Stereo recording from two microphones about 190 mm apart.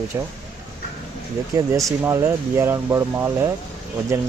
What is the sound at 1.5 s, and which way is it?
Speech, 15° right (ahead or behind).